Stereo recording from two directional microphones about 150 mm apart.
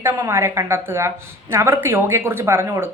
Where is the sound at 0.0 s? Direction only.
20° right (ahead or behind).